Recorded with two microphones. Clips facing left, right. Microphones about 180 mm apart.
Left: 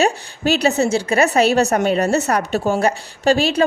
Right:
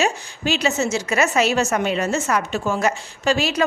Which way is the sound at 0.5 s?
35° left (ahead or behind).